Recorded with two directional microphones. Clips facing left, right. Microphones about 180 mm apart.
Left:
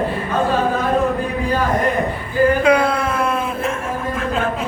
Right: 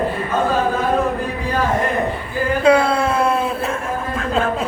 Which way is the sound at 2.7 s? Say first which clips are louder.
Right 1 dB; 25° right (ahead or behind).